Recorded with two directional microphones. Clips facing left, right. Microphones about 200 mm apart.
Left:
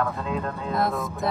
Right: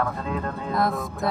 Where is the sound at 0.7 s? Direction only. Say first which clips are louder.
Right 1 dB; centre (ahead or behind).